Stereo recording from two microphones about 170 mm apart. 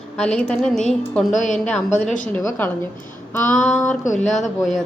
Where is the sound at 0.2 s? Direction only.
5° left (ahead or behind).